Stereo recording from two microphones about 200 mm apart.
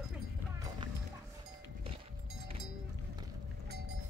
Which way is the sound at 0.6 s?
20° right (ahead or behind).